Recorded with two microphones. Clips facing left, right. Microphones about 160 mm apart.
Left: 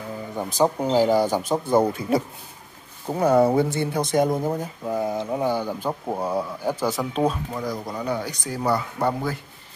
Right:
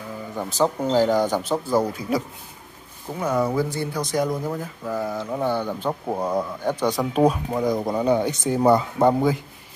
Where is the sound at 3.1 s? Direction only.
35° left (ahead or behind).